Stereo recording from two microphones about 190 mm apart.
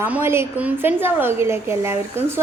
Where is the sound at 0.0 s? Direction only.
10° right (ahead or behind).